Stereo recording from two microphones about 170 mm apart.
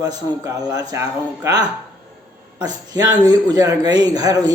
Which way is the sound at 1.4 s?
20° right (ahead or behind).